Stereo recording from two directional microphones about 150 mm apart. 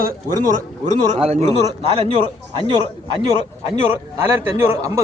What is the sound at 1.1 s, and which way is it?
A man's voice, 45° right (ahead or behind).